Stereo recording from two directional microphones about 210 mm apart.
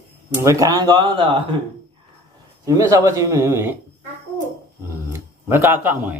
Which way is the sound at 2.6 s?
15° right (ahead or behind).